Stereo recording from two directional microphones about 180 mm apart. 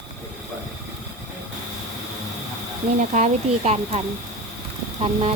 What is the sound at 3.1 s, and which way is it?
Speech, 40° right (ahead or behind).